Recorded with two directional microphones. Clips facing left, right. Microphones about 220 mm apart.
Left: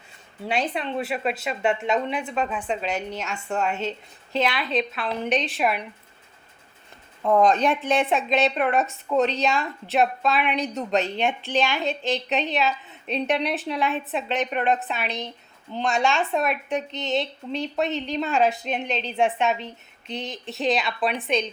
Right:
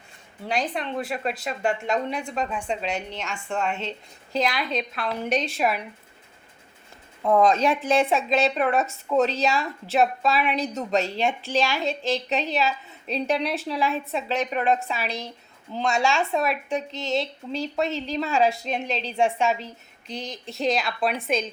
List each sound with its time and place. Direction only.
0.4 s speech: 5° left (ahead or behind)
7.2 s speech: centre (ahead or behind)